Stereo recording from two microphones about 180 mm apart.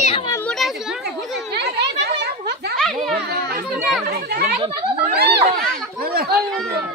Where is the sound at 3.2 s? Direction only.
60° right (ahead or behind).